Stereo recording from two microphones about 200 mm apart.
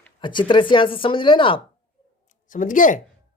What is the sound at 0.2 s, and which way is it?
Speech, 25° left (ahead or behind).